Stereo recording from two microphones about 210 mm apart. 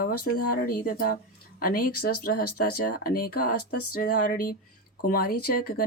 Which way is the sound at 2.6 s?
45° left (ahead or behind).